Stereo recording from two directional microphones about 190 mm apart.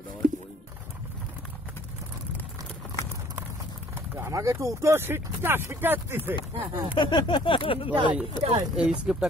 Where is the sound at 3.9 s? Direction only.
10° right (ahead or behind).